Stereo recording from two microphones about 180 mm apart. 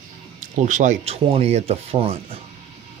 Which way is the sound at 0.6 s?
45° right (ahead or behind).